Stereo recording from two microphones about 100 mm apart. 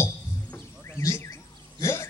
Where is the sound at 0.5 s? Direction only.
25° left (ahead or behind).